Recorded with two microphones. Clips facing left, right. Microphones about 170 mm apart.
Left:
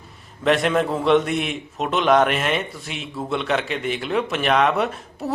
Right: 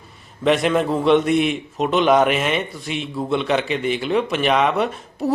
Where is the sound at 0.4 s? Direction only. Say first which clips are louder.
Right 2 dB; centre (ahead or behind).